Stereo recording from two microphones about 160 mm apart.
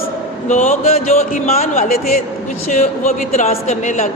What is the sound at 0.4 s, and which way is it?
A woman's voice, 50° left (ahead or behind).